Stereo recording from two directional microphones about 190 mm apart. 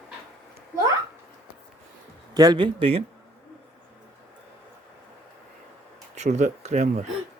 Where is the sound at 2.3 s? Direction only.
20° right (ahead or behind).